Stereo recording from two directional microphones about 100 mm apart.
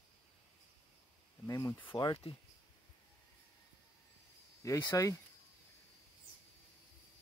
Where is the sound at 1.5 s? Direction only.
35° left (ahead or behind).